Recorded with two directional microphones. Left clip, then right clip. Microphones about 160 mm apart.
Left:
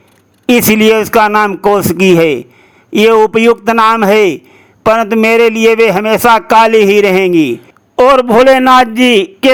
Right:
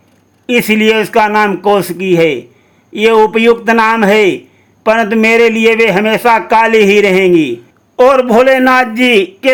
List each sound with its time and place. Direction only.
0.4 s a man's voice: 35° left (ahead or behind)